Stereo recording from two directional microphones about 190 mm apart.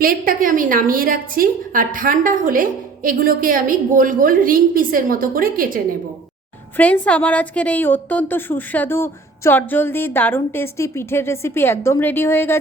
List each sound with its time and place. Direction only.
0.0 s a woman's voice: 50° right (ahead or behind)
6.7 s a woman's voice: 10° left (ahead or behind)